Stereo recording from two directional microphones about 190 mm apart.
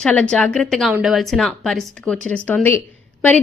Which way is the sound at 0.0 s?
5° left (ahead or behind).